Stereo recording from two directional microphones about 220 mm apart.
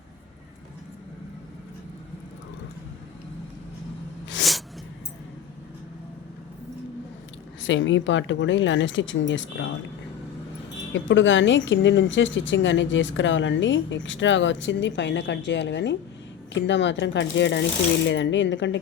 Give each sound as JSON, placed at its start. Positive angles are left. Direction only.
{"t": 7.6, "sound": "a woman's voice", "side_deg": 60}
{"t": 10.9, "sound": "a woman's voice", "side_deg": 55}